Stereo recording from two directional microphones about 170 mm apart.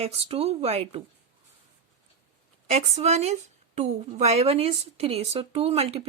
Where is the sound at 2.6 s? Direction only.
40° right (ahead or behind).